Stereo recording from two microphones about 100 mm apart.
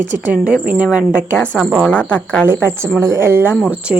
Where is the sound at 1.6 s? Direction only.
Centre (ahead or behind).